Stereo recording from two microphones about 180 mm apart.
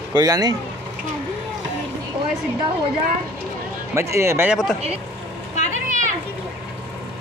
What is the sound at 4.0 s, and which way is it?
Speech, 15° right (ahead or behind).